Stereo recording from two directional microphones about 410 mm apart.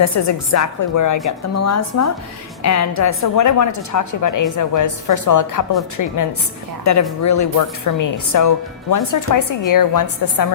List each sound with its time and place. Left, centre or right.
0.0 s a woman's voice: left